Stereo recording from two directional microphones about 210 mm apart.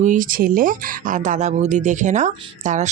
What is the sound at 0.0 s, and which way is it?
Speech, 40° right (ahead or behind).